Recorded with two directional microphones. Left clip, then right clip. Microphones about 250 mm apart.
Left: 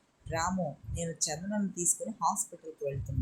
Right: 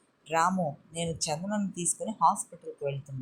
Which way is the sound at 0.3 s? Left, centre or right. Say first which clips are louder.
Right 6 dB; centre.